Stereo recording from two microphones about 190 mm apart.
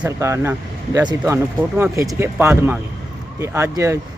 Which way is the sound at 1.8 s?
15° right (ahead or behind).